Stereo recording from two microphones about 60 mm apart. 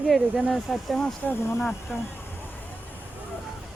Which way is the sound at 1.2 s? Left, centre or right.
Left.